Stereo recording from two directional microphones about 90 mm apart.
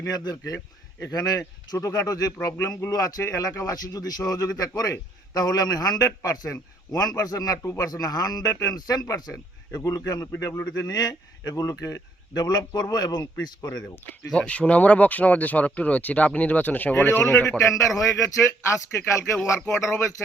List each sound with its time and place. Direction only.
0.0 s a man's voice: 45° left (ahead or behind)
10.8 s a man's voice: 45° left (ahead or behind)
14.3 s speech: 15° left (ahead or behind)
17.6 s a man's voice: 35° left (ahead or behind)